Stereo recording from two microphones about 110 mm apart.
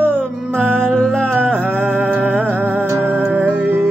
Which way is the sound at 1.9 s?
20° right (ahead or behind).